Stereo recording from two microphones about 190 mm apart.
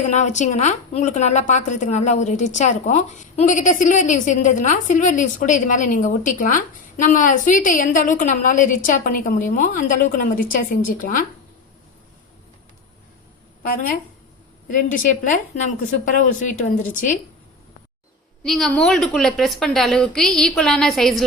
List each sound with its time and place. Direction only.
0.1 s a woman's voice: 40° left (ahead or behind)
13.6 s a woman's voice: 50° left (ahead or behind)
18.4 s a woman's voice: centre (ahead or behind)